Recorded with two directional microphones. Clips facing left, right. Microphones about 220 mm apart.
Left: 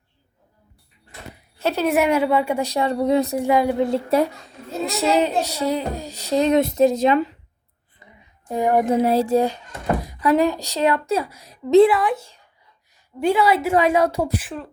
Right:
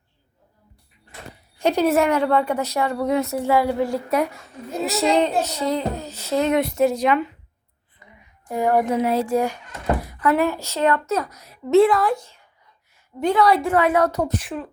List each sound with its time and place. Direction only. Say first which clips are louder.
1.5 s a sound: right 3 dB; 15° right (ahead or behind)
1.8 s a child's voice: left 1 dB; 10° left (ahead or behind); by 3.2 s 25° left (ahead or behind)
3.2 s a woman's voice: left 1 dB; 15° left (ahead or behind)
4.8 s a child's voice: even; centre (ahead or behind); by 7.3 s 25° left (ahead or behind)
8.4 s a woman's voice: left 1 dB; 20° left (ahead or behind)
9.0 s speech: left 3 dB; 35° left (ahead or behind)
10.0 s a woman's voice: left 3 dB; 15° left (ahead or behind)
11.9 s a woman's voice: even; 5° left (ahead or behind)